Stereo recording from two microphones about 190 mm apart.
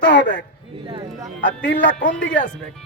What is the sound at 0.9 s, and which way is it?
Speech, 25° right (ahead or behind).